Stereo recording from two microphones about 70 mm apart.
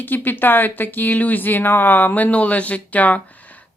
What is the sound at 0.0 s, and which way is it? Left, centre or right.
Speech, left.